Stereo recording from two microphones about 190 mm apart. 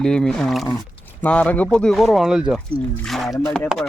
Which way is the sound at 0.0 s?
5° left (ahead or behind).